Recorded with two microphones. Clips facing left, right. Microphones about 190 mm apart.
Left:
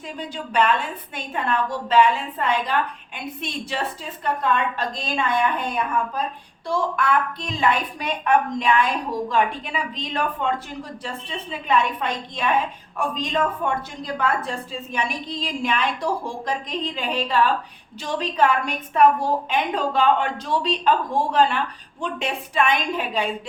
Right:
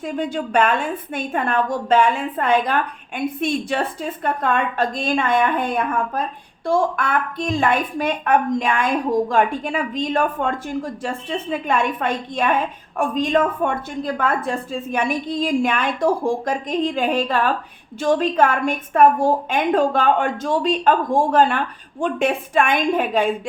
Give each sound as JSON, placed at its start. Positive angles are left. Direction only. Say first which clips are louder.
{"t": 0.0, "sound": "a woman's voice", "louder": "right 8 dB", "side_deg": -50}